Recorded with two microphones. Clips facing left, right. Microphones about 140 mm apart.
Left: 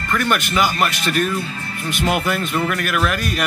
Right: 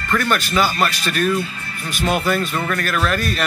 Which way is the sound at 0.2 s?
20° left (ahead or behind).